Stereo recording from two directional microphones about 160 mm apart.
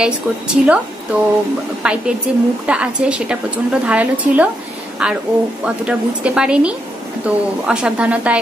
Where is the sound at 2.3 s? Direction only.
5° right (ahead or behind).